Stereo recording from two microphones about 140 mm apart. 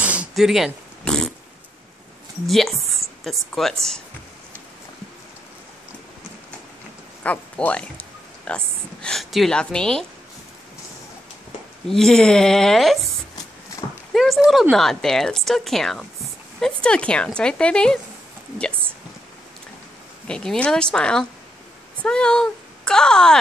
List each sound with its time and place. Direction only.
0.0 s a sound: 10° right (ahead or behind)
0.4 s speech: centre (ahead or behind)
2.4 s speech: centre (ahead or behind)
7.2 s speech: 10° left (ahead or behind)
11.9 s speech: 5° left (ahead or behind)
14.1 s speech: centre (ahead or behind)
20.2 s speech: 5° left (ahead or behind)